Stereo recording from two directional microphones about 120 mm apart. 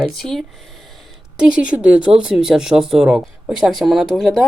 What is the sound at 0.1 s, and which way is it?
Speech, centre (ahead or behind).